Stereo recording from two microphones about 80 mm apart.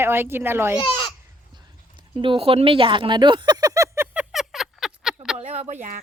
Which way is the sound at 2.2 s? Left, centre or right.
Right.